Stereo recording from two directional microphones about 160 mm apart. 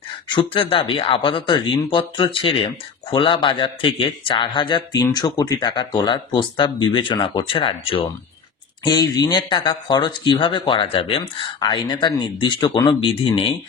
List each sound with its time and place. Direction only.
0.3 s speech: 30° left (ahead or behind)